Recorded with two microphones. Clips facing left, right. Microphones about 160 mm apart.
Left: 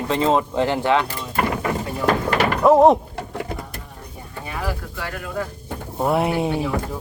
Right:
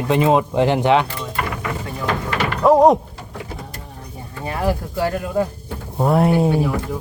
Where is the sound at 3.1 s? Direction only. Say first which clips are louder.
Left 4 dB; 65° left (ahead or behind).